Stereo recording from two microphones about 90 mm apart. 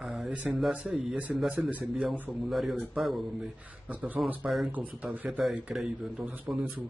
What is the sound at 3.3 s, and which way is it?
A man's voice, 15° right (ahead or behind).